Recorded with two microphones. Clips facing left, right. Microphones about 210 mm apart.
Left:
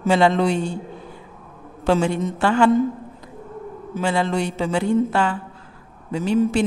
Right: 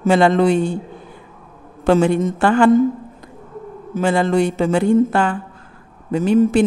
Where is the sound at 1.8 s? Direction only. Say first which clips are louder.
Right 5 dB; 55° right (ahead or behind).